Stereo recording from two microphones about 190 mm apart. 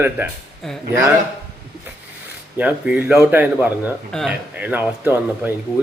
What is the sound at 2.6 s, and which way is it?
Speech, 5° right (ahead or behind).